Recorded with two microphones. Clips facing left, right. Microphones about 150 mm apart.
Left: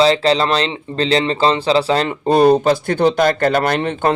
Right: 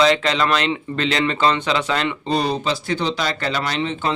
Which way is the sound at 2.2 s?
55° left (ahead or behind).